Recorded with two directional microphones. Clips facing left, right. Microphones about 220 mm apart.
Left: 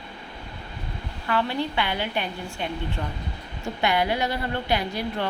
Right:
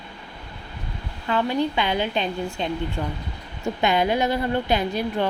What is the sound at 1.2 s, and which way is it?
A woman's voice, 15° right (ahead or behind).